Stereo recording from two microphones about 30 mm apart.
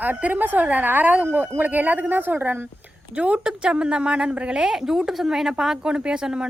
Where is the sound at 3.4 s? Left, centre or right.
Right.